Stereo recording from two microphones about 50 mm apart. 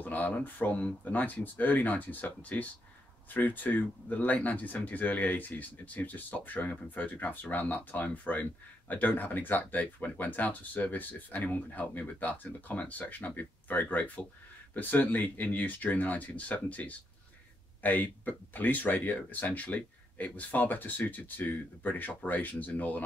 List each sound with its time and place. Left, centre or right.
0.0 s speech: left